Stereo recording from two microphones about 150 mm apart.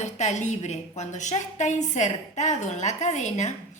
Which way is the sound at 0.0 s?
50° left (ahead or behind).